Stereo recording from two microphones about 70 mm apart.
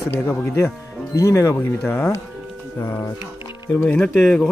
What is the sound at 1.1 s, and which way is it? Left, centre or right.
Speech, left.